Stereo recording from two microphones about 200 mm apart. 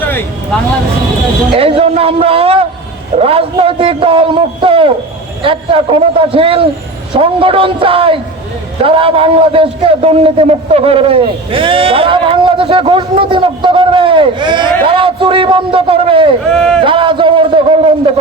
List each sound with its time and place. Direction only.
0.0 s vehicle: 10° left (ahead or behind)
1.5 s a man's voice: 30° right (ahead or behind)
16.5 s a man's voice: 5° left (ahead or behind)
16.8 s a man's voice: 25° right (ahead or behind)